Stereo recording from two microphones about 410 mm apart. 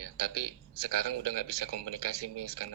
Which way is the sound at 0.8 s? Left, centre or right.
Right.